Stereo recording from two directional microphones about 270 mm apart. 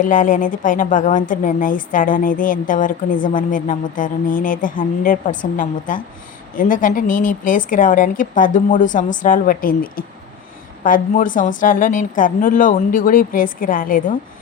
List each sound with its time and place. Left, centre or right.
0.0 s speech: left